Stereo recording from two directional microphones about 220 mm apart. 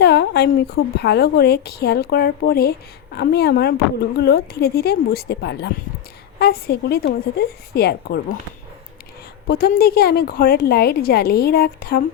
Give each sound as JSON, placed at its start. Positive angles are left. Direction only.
{"t": 0.0, "sound": "a sound", "side_deg": 50}
{"t": 0.9, "sound": "a woman's voice", "side_deg": 50}
{"t": 9.5, "sound": "a woman's voice", "side_deg": 40}